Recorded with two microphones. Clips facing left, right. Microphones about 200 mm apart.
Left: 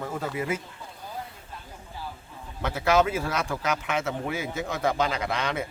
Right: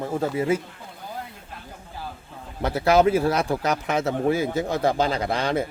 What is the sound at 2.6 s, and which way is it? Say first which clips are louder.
Speech: right 5 dB; 35° right (ahead or behind).